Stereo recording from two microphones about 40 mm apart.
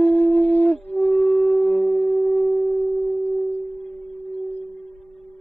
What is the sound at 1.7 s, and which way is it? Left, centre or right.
Shofar, centre.